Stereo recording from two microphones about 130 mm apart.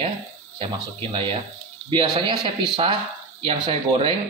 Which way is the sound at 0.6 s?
40° right (ahead or behind).